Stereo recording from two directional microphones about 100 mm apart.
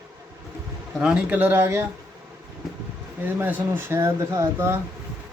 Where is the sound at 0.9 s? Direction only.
10° right (ahead or behind).